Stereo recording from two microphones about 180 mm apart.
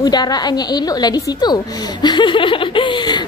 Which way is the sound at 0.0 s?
20° left (ahead or behind).